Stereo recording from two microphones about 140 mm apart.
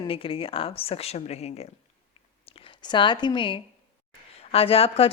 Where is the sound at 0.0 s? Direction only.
40° left (ahead or behind).